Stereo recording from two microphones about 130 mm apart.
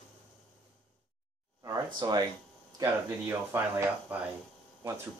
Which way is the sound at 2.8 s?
20° right (ahead or behind).